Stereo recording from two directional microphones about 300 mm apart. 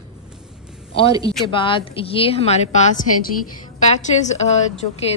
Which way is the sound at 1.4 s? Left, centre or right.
Centre.